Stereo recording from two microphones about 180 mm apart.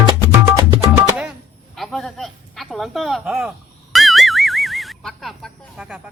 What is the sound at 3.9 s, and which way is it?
Boing, centre (ahead or behind).